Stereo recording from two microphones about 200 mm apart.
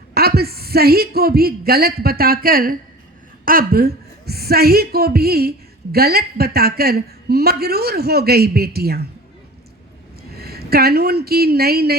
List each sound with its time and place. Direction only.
0.1 s a woman's voice: 50° right (ahead or behind)
10.3 s speech: 50° right (ahead or behind)